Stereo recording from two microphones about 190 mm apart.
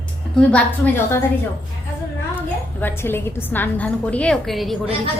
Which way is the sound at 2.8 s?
10° left (ahead or behind).